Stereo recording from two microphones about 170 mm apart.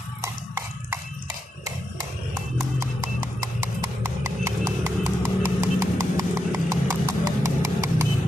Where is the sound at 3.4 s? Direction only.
15° right (ahead or behind).